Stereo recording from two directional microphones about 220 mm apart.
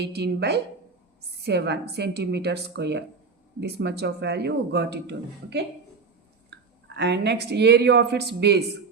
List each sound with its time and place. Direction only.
0.0 s a man's voice: 50° right (ahead or behind)